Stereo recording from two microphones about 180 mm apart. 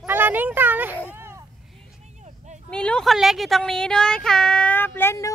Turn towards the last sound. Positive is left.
turn(degrees=15)  # may be behind; listen again after turning